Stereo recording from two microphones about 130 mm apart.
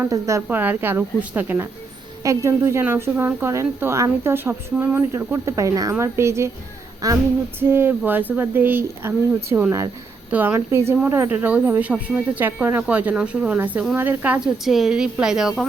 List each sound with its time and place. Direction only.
0.0 s speech: 25° right (ahead or behind)
0.4 s a woman's voice: 15° right (ahead or behind)
7.7 s a woman's voice: 15° right (ahead or behind)